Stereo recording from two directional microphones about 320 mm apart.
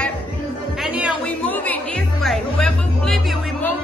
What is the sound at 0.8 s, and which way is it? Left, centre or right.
A man's voice, centre.